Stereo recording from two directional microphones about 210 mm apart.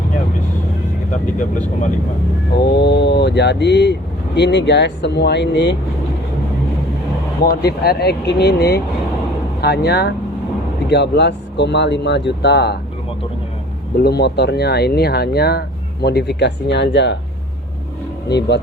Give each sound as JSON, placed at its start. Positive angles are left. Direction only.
{"t": 2.8, "sound": "speech", "side_deg": 55}
{"t": 7.4, "sound": "speech", "side_deg": 50}
{"t": 14.0, "sound": "speech", "side_deg": 50}
{"t": 18.3, "sound": "speech", "side_deg": 55}